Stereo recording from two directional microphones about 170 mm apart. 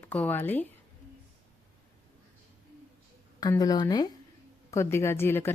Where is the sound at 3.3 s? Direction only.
20° left (ahead or behind).